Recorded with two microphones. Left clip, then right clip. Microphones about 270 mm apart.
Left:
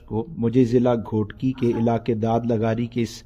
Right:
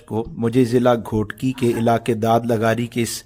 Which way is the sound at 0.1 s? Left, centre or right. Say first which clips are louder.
Right 2 dB; right.